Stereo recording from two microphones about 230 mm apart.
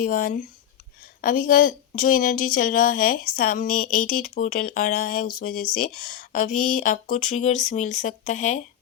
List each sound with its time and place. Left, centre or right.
0.0 s a woman's voice: left